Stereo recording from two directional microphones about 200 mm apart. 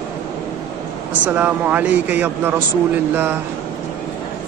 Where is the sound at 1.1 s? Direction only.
10° right (ahead or behind).